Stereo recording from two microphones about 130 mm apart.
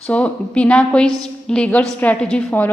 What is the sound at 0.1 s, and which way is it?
A woman's voice, 10° left (ahead or behind).